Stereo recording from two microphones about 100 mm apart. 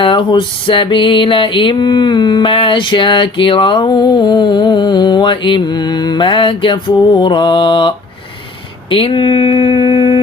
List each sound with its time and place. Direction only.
0.0 s music: 55° left (ahead or behind)